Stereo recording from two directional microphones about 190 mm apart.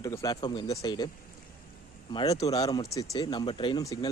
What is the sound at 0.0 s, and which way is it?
Speech, 20° left (ahead or behind).